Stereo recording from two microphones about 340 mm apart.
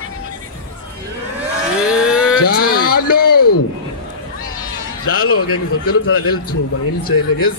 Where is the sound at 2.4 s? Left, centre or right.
Left.